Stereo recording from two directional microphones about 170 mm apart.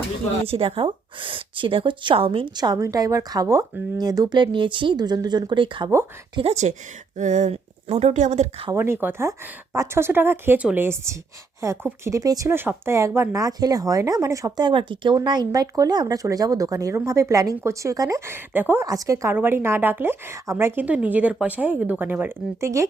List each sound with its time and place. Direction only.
0.4 s speech: 35° right (ahead or behind)
8.7 s speech: 15° right (ahead or behind)